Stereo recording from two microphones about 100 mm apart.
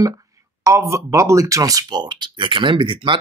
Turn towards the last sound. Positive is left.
turn(degrees=-55)  # may be behind; listen again after turning